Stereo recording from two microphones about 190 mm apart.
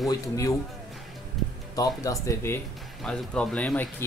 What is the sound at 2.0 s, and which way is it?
Speech, 15° left (ahead or behind).